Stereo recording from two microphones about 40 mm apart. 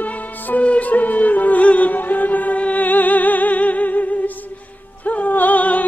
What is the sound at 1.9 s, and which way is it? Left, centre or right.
Music, left.